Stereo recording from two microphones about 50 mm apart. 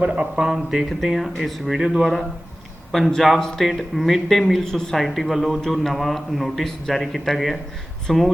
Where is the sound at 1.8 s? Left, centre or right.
Centre.